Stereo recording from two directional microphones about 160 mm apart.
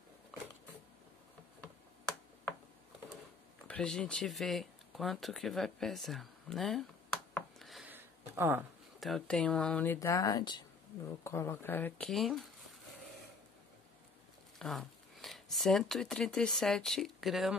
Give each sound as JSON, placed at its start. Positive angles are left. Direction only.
{"t": 3.6, "sound": "speech", "side_deg": 5}
{"t": 7.5, "sound": "a sound", "side_deg": 0}
{"t": 7.9, "sound": "a sound", "side_deg": -15}
{"t": 9.0, "sound": "speech", "side_deg": 5}
{"t": 9.9, "sound": "speech", "side_deg": 20}
{"t": 11.2, "sound": "speech", "side_deg": 15}
{"t": 12.1, "sound": "speech", "side_deg": 0}
{"t": 14.6, "sound": "speech", "side_deg": 0}